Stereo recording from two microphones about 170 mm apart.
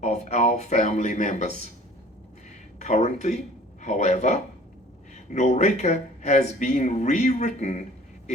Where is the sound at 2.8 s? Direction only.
45° left (ahead or behind).